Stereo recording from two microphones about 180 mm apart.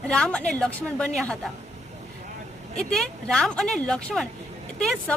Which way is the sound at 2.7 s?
5° left (ahead or behind).